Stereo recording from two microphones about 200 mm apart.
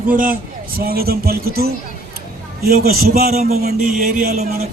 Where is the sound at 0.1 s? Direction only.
45° right (ahead or behind).